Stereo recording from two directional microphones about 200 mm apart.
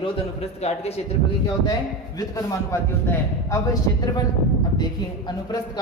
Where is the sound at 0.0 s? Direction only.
30° left (ahead or behind).